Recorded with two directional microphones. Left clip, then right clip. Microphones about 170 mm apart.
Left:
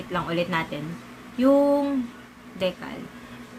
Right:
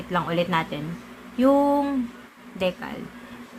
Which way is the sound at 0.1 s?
20° right (ahead or behind).